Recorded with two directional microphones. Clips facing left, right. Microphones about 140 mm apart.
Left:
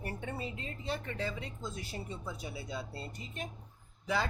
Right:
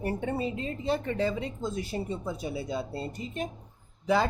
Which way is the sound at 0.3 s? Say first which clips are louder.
Right 9 dB; 25° right (ahead or behind).